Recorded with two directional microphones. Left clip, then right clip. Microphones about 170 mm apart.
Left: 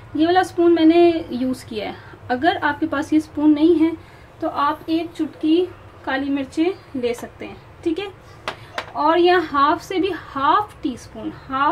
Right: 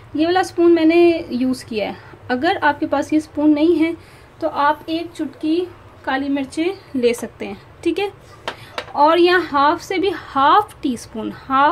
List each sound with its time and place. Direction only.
0.1 s a woman's voice: 25° right (ahead or behind); by 11.3 s 50° right (ahead or behind)